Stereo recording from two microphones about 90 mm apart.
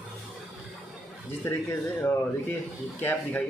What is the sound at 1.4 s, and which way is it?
Speech, 25° left (ahead or behind).